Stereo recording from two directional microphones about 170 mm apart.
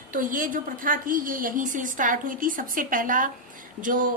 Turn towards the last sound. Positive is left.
turn(degrees=-50)  # may be behind; listen again after turning